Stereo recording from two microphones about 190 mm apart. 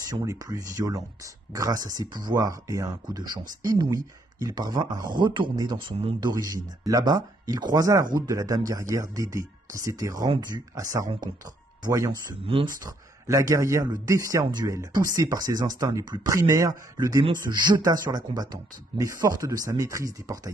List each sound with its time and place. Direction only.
0.1 s speech: 20° right (ahead or behind)